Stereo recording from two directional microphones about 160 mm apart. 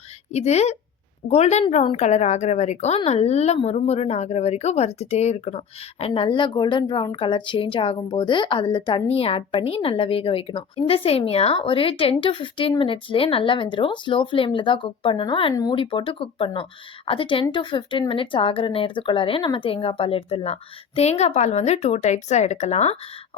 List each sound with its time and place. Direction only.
0.3 s a woman's voice: 45° left (ahead or behind)